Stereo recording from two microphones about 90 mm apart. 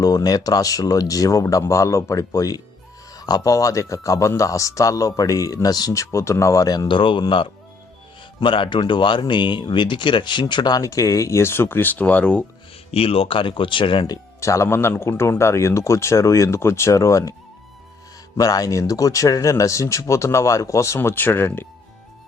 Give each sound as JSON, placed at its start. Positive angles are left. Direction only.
{"t": 0.0, "sound": "speech", "side_deg": 45}
{"t": 12.9, "sound": "speech", "side_deg": 90}
{"t": 14.1, "sound": "speech", "side_deg": 35}
{"t": 18.3, "sound": "speech", "side_deg": 40}